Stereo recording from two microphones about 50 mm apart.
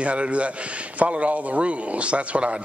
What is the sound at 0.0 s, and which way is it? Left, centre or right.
A man's voice, right.